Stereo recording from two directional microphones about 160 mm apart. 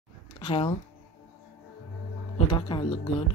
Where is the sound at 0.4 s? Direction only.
35° left (ahead or behind).